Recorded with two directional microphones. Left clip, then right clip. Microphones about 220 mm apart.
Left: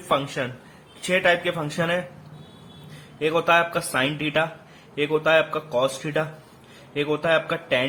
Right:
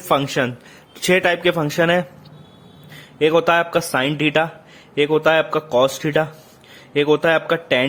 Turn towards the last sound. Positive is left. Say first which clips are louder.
# right 4 dB
turn(degrees=-45)  # may be behind; listen again after turning